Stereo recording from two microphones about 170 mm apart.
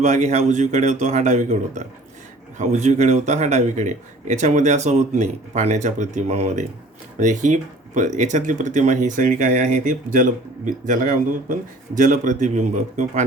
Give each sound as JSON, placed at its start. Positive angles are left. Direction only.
{"t": 0.0, "sound": "speech", "side_deg": -45}